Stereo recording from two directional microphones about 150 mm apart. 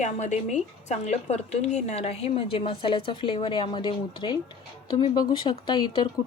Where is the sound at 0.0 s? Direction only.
50° left (ahead or behind).